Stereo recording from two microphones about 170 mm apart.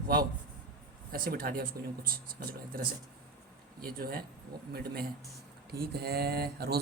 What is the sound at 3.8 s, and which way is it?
A man's voice, 60° right (ahead or behind).